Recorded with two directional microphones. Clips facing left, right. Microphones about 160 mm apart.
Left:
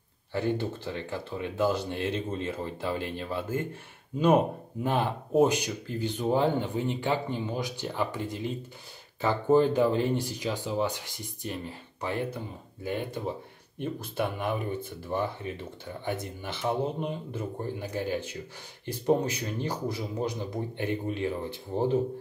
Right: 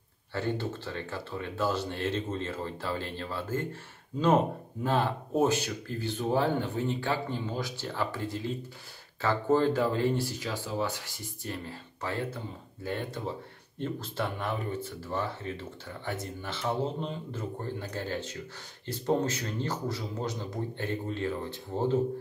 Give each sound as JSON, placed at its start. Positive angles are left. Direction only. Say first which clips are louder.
{"t": 0.3, "sound": "speech", "louder": "left 3 dB", "side_deg": 15}
{"t": 4.8, "sound": "speech", "louder": "even", "side_deg": 15}